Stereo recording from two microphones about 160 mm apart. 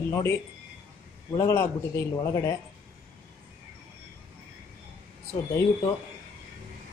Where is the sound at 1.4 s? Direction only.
15° left (ahead or behind).